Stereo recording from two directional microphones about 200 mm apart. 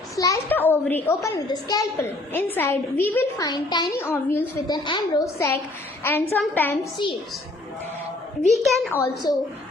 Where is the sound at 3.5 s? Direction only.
20° left (ahead or behind).